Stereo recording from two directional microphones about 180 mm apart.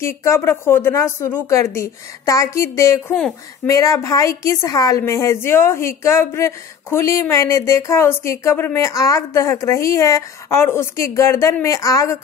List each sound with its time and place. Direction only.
0.0 s a woman's voice: 15° left (ahead or behind)